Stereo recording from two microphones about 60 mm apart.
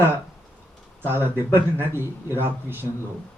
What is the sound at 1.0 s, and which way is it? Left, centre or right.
A man's voice, right.